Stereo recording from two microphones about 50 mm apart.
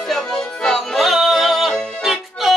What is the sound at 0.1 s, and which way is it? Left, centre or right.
Music, centre.